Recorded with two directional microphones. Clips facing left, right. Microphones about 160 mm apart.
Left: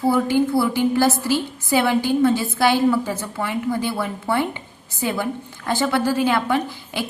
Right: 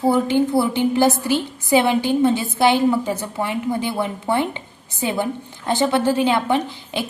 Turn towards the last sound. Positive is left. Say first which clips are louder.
# right 1 dB
turn(degrees=-20)  # may be behind; listen again after turning